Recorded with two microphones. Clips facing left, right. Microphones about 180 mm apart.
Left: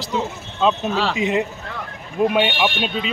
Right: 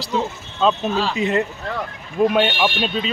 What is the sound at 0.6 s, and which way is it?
Speech, 10° left (ahead or behind).